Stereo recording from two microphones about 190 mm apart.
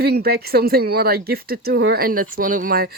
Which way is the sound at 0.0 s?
55° right (ahead or behind).